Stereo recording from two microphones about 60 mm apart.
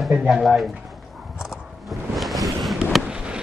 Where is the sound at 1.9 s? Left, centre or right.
Centre.